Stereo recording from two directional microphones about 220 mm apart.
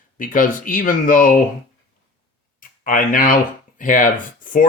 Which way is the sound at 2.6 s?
40° left (ahead or behind).